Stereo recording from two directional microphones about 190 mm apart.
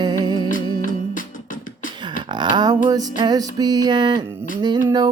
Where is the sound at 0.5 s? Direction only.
45° left (ahead or behind).